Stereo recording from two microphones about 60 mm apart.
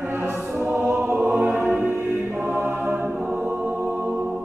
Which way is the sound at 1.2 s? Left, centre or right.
Right.